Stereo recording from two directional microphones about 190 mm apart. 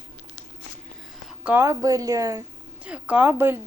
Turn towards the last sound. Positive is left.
turn(degrees=-10)  # may be behind; listen again after turning